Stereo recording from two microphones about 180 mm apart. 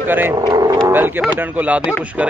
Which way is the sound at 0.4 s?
20° right (ahead or behind).